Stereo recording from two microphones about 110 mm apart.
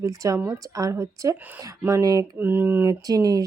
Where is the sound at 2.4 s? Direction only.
20° right (ahead or behind).